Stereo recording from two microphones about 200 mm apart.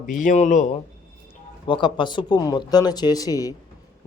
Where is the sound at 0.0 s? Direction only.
40° left (ahead or behind).